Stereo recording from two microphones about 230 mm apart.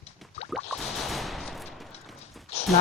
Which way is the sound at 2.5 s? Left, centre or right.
Left.